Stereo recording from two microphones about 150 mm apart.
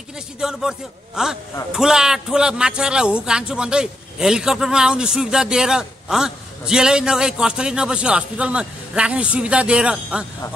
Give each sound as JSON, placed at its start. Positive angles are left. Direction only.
{"t": 0.4, "sound": "a man's voice", "side_deg": -5}